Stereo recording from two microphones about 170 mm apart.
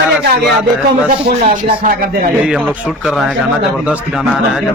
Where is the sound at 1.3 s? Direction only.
45° right (ahead or behind).